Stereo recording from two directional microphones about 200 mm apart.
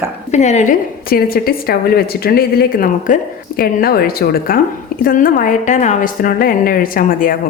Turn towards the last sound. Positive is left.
turn(degrees=45)  # may be behind; listen again after turning